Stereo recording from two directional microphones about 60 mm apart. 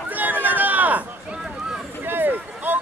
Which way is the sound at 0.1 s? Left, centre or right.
Right.